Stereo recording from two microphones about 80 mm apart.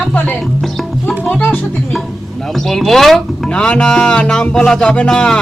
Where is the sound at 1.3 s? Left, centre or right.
Left.